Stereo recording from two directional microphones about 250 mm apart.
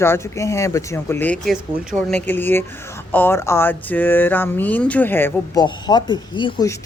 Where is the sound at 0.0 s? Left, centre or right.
Centre.